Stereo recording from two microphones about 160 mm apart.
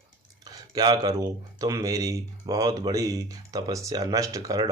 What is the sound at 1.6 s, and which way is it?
Speech, 20° right (ahead or behind).